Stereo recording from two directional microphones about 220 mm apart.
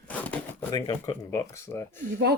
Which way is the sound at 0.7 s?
20° left (ahead or behind).